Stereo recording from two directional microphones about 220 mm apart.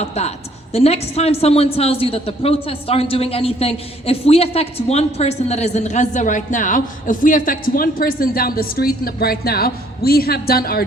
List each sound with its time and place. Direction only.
0.0 s a woman's voice: 30° left (ahead or behind)